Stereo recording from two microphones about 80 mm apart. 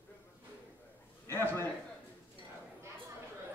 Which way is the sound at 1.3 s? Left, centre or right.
Left.